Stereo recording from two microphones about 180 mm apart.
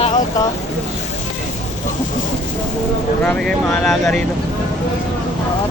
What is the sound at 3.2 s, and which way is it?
Speech, 5° left (ahead or behind).